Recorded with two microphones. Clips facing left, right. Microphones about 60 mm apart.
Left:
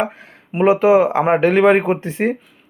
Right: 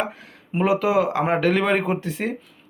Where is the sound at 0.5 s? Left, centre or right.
Left.